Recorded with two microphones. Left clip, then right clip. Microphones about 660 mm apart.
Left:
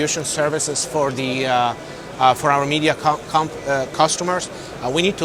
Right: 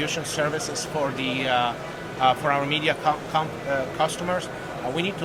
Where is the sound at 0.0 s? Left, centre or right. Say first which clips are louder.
Left 5 dB; left.